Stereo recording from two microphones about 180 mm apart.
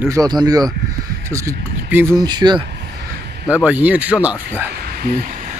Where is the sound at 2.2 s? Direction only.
25° right (ahead or behind).